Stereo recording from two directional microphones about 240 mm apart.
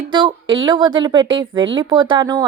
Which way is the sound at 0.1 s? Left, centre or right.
Centre.